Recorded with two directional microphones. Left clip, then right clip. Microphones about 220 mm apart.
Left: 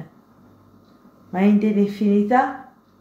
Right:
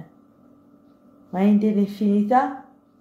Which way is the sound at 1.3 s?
20° right (ahead or behind).